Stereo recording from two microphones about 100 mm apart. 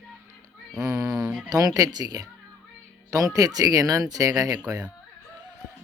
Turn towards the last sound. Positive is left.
turn(degrees=-35)  # may be behind; listen again after turning